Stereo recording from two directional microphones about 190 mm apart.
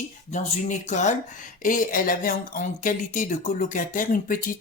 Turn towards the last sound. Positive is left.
turn(degrees=45)  # may be behind; listen again after turning